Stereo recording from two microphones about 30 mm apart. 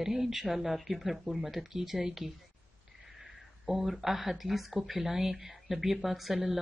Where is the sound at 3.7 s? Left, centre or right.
Centre.